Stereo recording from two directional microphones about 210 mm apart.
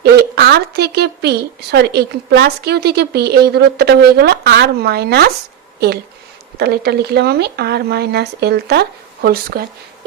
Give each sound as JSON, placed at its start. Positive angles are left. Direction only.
{"t": 0.0, "sound": "speech", "side_deg": -50}
{"t": 6.6, "sound": "speech", "side_deg": -50}